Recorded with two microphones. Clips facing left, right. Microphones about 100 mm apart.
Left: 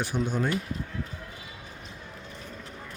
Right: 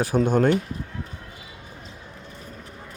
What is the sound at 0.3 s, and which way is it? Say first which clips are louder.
Speech: right 9 dB; 60° right (ahead or behind).